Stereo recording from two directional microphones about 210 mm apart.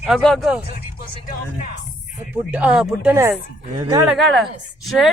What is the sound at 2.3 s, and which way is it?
A woman's voice, 5° right (ahead or behind).